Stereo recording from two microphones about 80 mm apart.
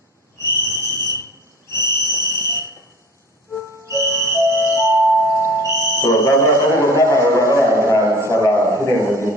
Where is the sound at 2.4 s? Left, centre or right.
Right.